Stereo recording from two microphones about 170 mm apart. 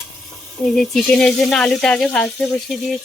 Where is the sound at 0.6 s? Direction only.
Centre (ahead or behind).